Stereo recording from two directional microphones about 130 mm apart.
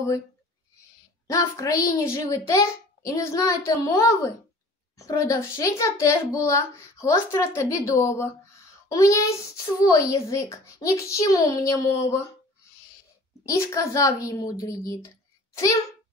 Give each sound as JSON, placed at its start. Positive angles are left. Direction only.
{"t": 1.2, "sound": "a child's voice", "side_deg": 25}
{"t": 13.5, "sound": "a child's voice", "side_deg": 25}